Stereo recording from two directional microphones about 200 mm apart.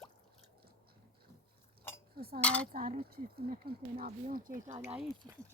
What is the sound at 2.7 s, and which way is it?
Speech, 40° right (ahead or behind).